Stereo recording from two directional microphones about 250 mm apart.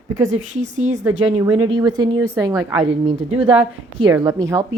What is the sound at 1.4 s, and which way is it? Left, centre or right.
Speech, centre.